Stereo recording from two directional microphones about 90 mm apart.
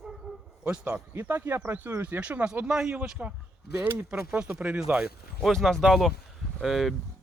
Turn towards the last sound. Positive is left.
turn(degrees=0)  # may be behind; listen again after turning